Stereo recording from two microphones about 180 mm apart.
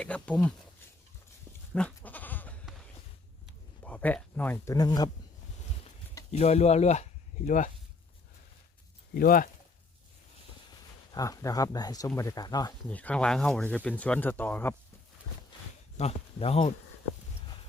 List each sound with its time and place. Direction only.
0.0 s speech: 5° left (ahead or behind)
2.0 s goat: 10° left (ahead or behind)
3.8 s speech: 10° left (ahead or behind)
6.3 s speech: 40° left (ahead or behind)
9.1 s speech: 50° left (ahead or behind)
11.1 s speech: 20° left (ahead or behind)
12.9 s speech: 10° left (ahead or behind)
16.0 s speech: 35° left (ahead or behind)